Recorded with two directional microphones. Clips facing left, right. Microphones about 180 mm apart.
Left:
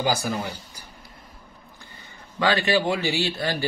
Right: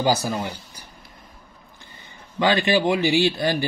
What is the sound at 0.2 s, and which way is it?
Speech, 25° right (ahead or behind).